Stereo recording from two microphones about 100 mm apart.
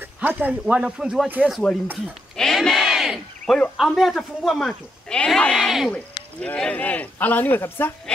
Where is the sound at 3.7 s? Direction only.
Centre (ahead or behind); by 7.9 s 20° left (ahead or behind).